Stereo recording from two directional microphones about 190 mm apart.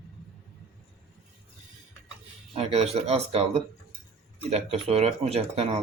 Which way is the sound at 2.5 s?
35° right (ahead or behind).